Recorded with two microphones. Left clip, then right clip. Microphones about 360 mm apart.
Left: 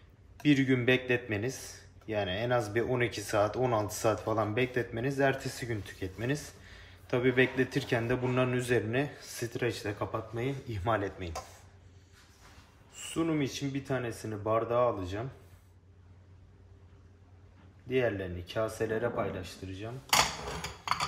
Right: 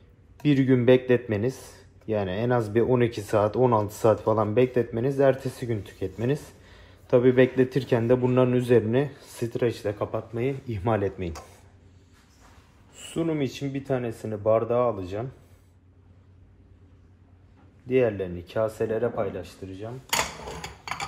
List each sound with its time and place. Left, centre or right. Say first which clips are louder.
0.4 s speech: right 5 dB; centre
12.9 s speech: right 4 dB; centre
17.8 s speech: right 7 dB; centre